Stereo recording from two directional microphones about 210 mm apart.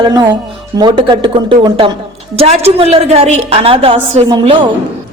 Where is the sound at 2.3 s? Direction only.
30° right (ahead or behind).